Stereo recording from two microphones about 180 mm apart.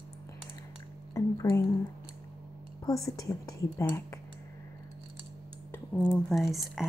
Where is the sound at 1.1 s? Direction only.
20° left (ahead or behind).